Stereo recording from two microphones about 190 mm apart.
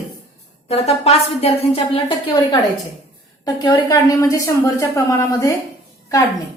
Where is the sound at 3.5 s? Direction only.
20° left (ahead or behind).